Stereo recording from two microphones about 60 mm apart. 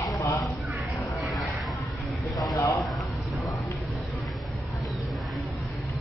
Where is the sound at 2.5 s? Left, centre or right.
Left.